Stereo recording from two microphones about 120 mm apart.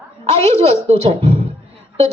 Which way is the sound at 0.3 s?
60° right (ahead or behind).